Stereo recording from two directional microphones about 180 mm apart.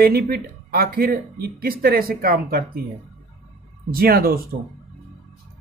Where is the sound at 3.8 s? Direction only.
55° right (ahead or behind).